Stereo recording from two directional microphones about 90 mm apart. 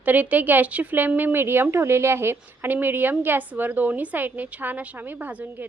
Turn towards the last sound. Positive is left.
turn(degrees=-20)  # may be behind; listen again after turning